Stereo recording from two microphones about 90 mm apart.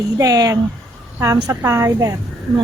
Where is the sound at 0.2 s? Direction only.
45° right (ahead or behind).